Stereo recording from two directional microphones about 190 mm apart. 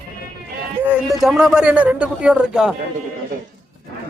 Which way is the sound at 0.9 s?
Centre (ahead or behind).